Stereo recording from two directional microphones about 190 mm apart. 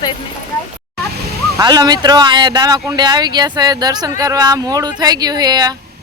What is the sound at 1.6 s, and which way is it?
Speech, 20° right (ahead or behind).